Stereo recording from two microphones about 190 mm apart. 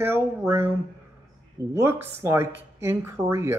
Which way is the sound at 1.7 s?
15° right (ahead or behind).